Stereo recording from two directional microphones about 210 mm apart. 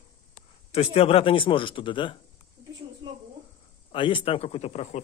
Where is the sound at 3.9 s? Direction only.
25° left (ahead or behind).